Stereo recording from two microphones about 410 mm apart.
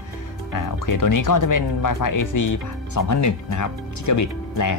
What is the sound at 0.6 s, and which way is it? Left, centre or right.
Speech, left.